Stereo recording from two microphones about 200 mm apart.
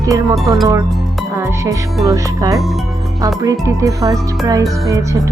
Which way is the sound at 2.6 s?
Centre (ahead or behind).